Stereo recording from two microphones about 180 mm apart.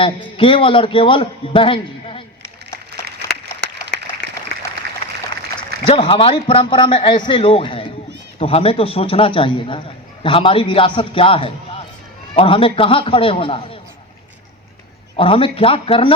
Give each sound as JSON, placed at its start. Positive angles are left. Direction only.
{"t": 0.0, "sound": "a man's voice", "side_deg": 30}
{"t": 5.8, "sound": "a man's voice", "side_deg": 30}
{"t": 15.1, "sound": "speech", "side_deg": 30}